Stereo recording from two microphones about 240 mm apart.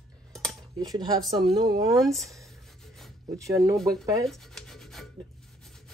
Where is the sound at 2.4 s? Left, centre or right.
Centre.